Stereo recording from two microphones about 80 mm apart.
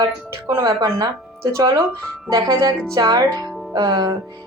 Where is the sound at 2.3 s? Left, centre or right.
Right.